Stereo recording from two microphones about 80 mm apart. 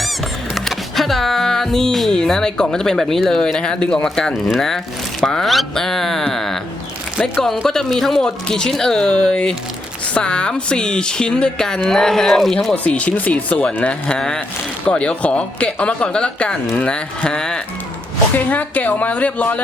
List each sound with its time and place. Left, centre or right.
0.5 s speech: centre
12.7 s speech: centre
18.3 s a woman's voice: left